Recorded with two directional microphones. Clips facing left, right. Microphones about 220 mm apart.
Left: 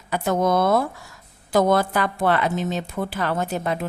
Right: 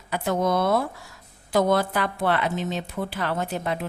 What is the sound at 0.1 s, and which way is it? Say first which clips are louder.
Speech: left 3 dB; 45° left (ahead or behind).